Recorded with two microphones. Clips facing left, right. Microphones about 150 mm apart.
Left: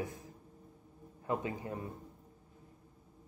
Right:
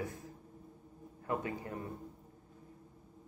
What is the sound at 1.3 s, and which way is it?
Speech, 20° left (ahead or behind).